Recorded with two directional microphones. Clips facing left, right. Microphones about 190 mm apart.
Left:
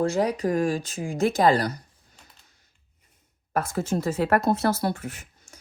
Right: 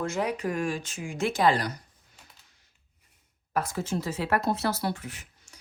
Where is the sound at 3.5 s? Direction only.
50° left (ahead or behind).